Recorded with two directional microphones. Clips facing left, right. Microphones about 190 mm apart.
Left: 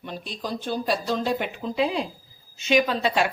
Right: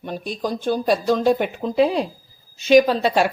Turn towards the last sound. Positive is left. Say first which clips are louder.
# right 5 dB
turn(degrees=-40)  # may be behind; listen again after turning